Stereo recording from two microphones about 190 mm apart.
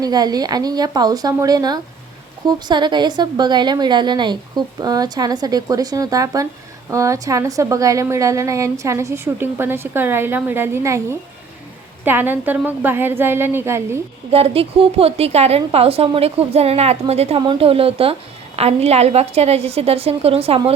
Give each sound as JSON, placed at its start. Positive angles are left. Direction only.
{"t": 0.0, "sound": "a woman's voice", "side_deg": -20}
{"t": 14.3, "sound": "a woman's voice", "side_deg": -30}